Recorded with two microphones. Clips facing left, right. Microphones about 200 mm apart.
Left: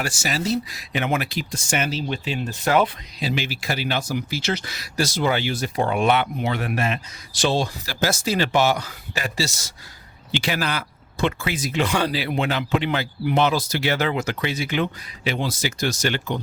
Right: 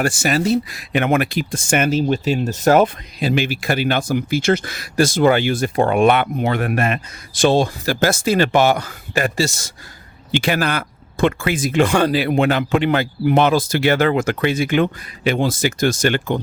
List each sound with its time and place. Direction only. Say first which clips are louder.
0.0 s speech: right 7 dB; 55° right (ahead or behind)